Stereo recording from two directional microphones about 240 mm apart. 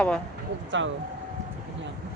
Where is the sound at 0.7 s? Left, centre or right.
Right.